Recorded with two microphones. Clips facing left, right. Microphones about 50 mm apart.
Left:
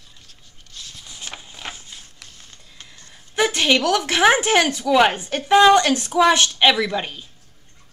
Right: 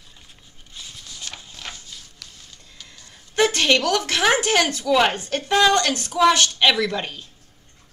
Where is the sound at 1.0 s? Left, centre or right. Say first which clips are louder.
Left 3 dB; centre.